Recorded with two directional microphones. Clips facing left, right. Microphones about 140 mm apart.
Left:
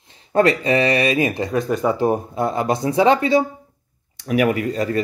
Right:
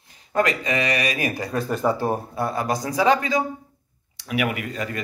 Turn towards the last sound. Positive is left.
turn(degrees=35)  # may be behind; listen again after turning